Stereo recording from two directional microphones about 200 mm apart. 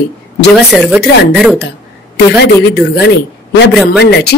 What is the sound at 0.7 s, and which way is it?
Speech, centre (ahead or behind).